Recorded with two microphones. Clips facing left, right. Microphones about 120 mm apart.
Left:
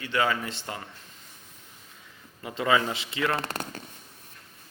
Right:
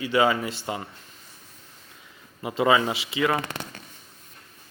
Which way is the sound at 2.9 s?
5° right (ahead or behind).